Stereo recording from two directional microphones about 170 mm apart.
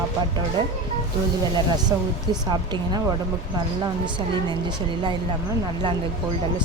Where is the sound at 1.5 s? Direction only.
25° right (ahead or behind).